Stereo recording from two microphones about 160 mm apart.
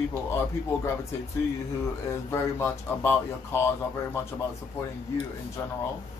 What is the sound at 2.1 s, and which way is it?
Speech, 15° left (ahead or behind).